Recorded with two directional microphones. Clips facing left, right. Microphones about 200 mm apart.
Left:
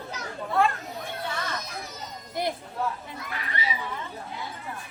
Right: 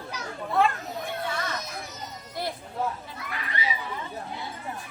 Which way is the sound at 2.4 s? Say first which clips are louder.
Left 3 dB; 20° left (ahead or behind).